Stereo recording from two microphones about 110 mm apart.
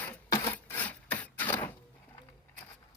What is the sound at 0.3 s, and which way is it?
Rub, 25° left (ahead or behind).